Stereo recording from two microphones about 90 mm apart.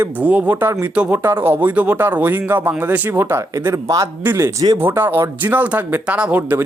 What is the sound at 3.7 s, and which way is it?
Speech, 40° right (ahead or behind).